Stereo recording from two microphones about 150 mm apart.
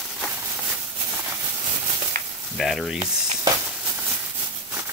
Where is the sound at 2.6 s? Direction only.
Centre (ahead or behind).